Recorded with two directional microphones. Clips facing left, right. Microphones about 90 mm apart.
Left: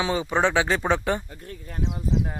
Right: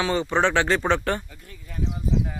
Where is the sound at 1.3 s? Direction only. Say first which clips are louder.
Left 5 dB; 45° left (ahead or behind).